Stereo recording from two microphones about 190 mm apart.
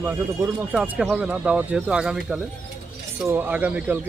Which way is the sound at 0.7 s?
5° right (ahead or behind).